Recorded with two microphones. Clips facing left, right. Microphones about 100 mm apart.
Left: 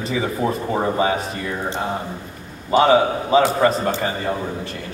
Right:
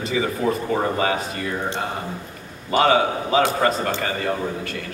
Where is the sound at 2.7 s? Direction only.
25° left (ahead or behind).